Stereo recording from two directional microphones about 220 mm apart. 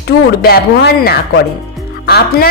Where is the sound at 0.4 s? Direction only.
45° left (ahead or behind).